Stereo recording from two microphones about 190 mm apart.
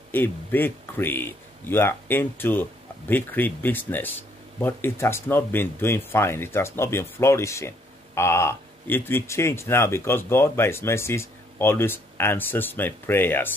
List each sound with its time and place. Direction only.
0.1 s speech: 10° left (ahead or behind)